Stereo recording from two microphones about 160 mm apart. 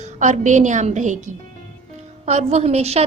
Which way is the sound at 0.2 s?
50° right (ahead or behind).